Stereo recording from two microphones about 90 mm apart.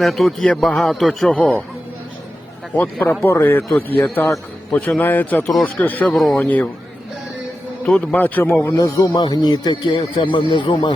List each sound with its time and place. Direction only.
0.0 s a man's voice: centre (ahead or behind)
1.4 s speech: 15° left (ahead or behind)
2.7 s a man's voice: 20° left (ahead or behind)
6.1 s a man's voice: centre (ahead or behind)
6.4 s speech: 15° left (ahead or behind)
7.9 s speech: 10° left (ahead or behind)
8.1 s a man's voice: 20° left (ahead or behind)
8.7 s speech: 50° left (ahead or behind)